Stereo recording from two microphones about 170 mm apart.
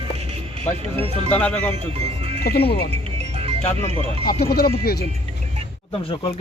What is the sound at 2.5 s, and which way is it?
Speech, 70° left (ahead or behind).